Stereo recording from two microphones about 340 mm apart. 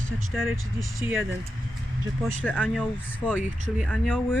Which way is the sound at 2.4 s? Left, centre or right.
Centre.